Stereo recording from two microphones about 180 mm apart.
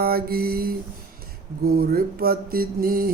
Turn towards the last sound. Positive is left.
turn(degrees=-55)  # may be behind; listen again after turning